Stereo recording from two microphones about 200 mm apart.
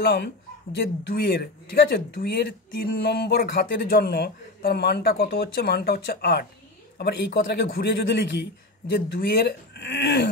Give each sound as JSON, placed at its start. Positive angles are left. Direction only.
{"t": 0.0, "sound": "speech", "side_deg": 55}